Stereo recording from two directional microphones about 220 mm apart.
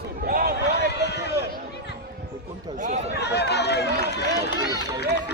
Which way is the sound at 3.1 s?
50° left (ahead or behind).